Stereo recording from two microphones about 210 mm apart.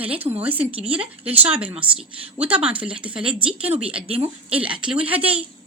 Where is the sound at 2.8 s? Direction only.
5° right (ahead or behind).